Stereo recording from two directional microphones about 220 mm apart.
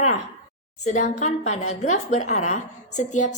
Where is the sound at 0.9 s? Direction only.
30° left (ahead or behind).